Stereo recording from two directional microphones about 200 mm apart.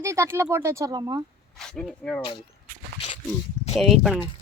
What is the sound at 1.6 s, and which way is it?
Speech, 5° left (ahead or behind).